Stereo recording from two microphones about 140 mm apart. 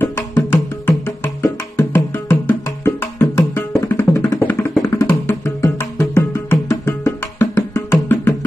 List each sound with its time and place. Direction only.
0.0 s music: 15° left (ahead or behind)